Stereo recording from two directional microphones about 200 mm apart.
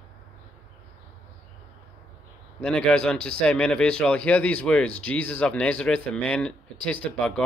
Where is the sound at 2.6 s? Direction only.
5° left (ahead or behind).